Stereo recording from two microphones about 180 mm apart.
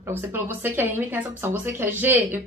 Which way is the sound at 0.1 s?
10° right (ahead or behind).